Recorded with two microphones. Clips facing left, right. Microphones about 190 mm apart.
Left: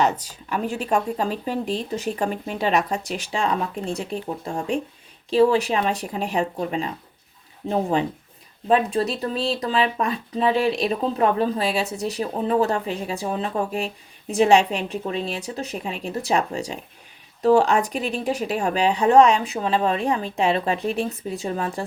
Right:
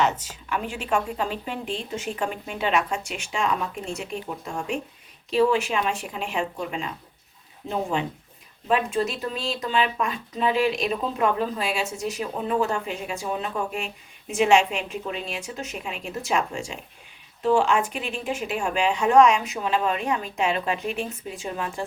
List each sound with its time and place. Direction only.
0.0 s speech: 40° left (ahead or behind)